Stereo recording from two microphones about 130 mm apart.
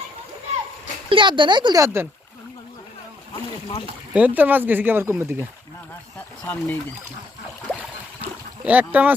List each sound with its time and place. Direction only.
1.1 s speech: 40° right (ahead or behind)
1.8 s speech: 20° right (ahead or behind)
4.1 s speech: 10° right (ahead or behind)
6.4 s speech: 15° left (ahead or behind)
8.6 s speech: 10° right (ahead or behind)